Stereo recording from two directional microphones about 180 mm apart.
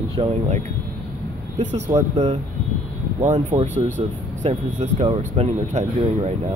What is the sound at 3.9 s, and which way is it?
Speech, 40° right (ahead or behind).